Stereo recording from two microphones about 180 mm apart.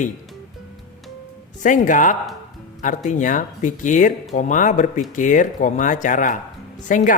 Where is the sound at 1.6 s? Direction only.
45° left (ahead or behind).